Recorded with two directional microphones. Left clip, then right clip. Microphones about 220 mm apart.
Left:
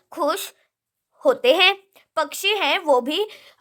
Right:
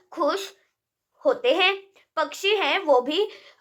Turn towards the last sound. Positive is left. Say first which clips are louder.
# even
turn(degrees=45)  # may be behind; listen again after turning